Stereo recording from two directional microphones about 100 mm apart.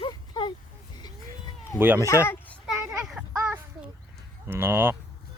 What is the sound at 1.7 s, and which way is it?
Speech, 20° right (ahead or behind).